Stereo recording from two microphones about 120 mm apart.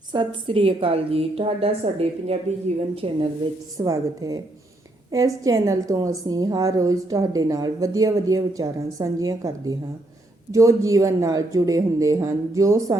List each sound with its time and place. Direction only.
0.1 s a woman's voice: 40° right (ahead or behind)
3.8 s a woman's voice: 30° right (ahead or behind)